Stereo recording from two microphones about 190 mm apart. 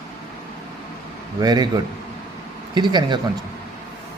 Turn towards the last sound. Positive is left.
turn(degrees=-25)  # may be behind; listen again after turning